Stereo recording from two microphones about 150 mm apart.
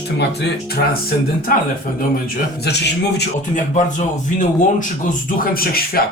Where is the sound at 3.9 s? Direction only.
60° left (ahead or behind); by 6.0 s 80° left.